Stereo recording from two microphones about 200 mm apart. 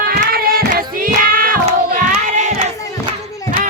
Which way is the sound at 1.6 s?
35° right (ahead or behind).